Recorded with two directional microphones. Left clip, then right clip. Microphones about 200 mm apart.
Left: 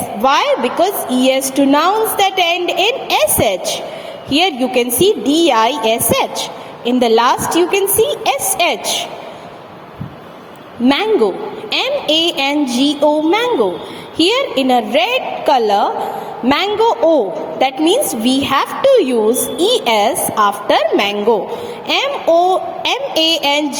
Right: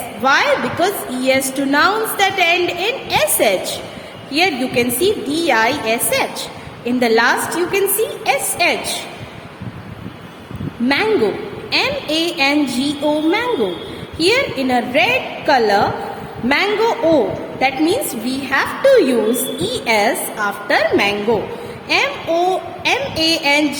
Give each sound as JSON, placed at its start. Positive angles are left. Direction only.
{"t": 0.2, "sound": "a woman's voice", "side_deg": 30}
{"t": 11.7, "sound": "a woman's voice", "side_deg": 30}
{"t": 21.8, "sound": "a woman's voice", "side_deg": 30}